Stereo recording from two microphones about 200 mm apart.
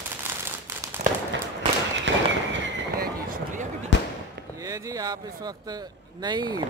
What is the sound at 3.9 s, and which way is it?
Fireworks, 65° left (ahead or behind).